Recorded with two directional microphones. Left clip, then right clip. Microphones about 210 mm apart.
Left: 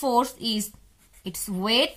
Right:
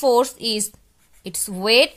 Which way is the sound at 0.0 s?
45° right (ahead or behind).